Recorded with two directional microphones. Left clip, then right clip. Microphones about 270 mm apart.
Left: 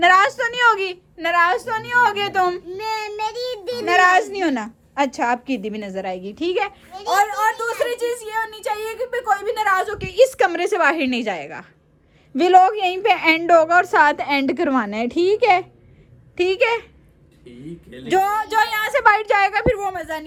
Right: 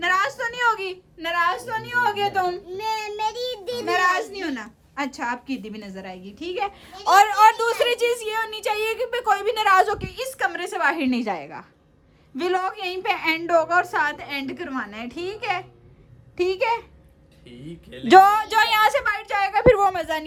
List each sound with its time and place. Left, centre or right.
0.0 s a woman's voice: centre
2.6 s child singing: left
3.8 s a woman's voice: centre
7.4 s a woman's voice: centre
9.7 s a woman's voice: right
10.0 s a woman's voice: centre
16.4 s a woman's voice: centre
18.3 s a woman's voice: centre
18.7 s a woman's voice: right
19.0 s a woman's voice: centre